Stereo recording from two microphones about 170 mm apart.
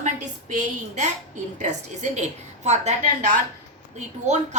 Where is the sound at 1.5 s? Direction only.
45° right (ahead or behind).